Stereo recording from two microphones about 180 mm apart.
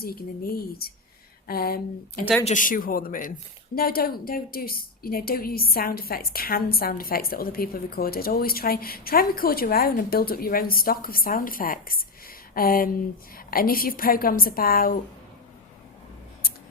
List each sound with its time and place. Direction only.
0.0 s a woman's voice: 55° left (ahead or behind)
2.4 s a woman's voice: 45° left (ahead or behind)